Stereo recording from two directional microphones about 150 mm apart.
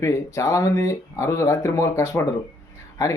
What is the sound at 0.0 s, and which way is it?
Speech, 20° left (ahead or behind).